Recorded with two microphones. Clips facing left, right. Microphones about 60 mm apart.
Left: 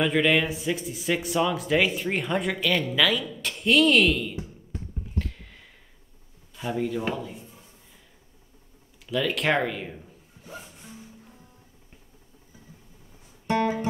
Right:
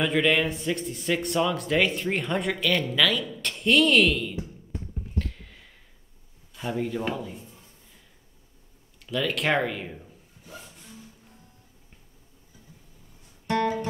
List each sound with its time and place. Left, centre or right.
0.0 s speech: centre
5.2 s a sound: centre
6.5 s speech: centre
9.0 s speech: centre
10.4 s music: centre
13.5 s music: centre